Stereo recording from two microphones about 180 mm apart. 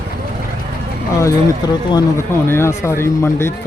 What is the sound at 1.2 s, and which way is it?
Speech, 15° left (ahead or behind).